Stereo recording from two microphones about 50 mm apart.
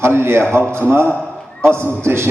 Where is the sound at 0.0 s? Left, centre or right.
Right.